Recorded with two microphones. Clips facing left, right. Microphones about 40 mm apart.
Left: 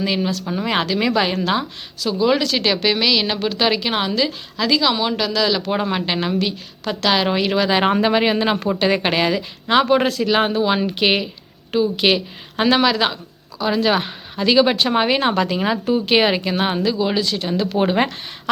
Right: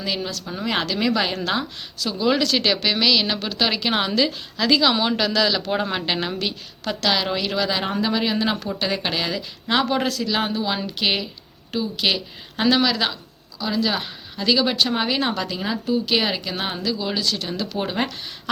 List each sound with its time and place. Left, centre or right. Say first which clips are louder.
0.0 s a woman's voice: left 6 dB; centre
7.8 s speech: left 7 dB; left